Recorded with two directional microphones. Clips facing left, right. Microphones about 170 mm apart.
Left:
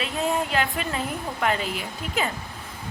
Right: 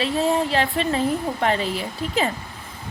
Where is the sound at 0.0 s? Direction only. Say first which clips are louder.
Right 5 dB; 35° right (ahead or behind).